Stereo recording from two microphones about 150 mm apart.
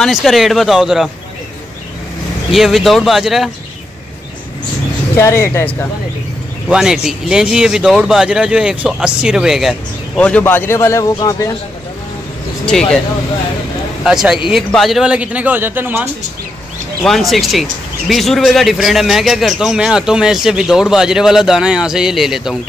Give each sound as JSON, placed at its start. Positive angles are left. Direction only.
{"t": 0.0, "sound": "speech", "side_deg": 0}
{"t": 2.5, "sound": "speech", "side_deg": 0}
{"t": 5.1, "sound": "speech", "side_deg": 20}
{"t": 6.7, "sound": "speech", "side_deg": -5}
{"t": 12.6, "sound": "speech", "side_deg": 5}
{"t": 14.0, "sound": "speech", "side_deg": -5}
{"t": 17.0, "sound": "speech", "side_deg": 0}